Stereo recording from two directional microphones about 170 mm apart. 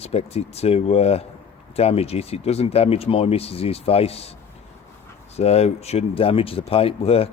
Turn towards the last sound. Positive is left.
turn(degrees=35)  # may be behind; listen again after turning